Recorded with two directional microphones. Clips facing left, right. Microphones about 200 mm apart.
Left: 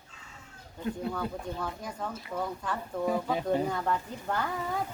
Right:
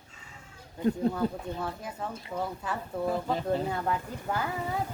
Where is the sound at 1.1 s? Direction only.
5° right (ahead or behind).